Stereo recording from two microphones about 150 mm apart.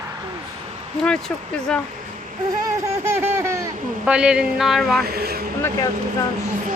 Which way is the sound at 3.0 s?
15° right (ahead or behind).